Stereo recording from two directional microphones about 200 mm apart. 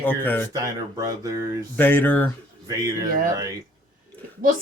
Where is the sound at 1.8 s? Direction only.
10° left (ahead or behind).